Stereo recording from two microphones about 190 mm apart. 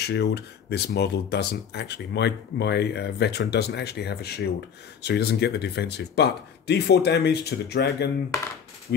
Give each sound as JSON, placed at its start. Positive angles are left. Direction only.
{"t": 0.0, "sound": "speech", "side_deg": 60}